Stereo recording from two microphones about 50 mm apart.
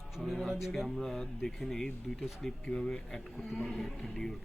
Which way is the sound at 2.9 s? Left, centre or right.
Centre.